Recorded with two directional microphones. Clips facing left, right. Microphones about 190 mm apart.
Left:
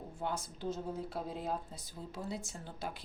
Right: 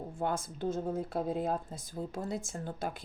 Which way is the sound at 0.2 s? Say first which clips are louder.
Right 5 dB; 50° right (ahead or behind).